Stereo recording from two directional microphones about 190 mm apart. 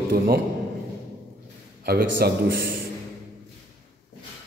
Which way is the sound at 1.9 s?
55° right (ahead or behind).